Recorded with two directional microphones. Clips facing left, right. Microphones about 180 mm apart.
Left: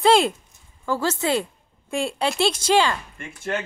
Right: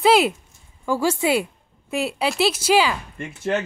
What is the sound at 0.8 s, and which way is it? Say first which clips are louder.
A woman's voice: right 3 dB; 10° right (ahead or behind).